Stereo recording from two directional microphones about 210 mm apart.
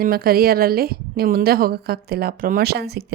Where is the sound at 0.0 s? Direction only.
45° right (ahead or behind).